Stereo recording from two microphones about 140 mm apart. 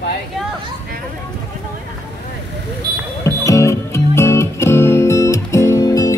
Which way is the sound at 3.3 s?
20° left (ahead or behind).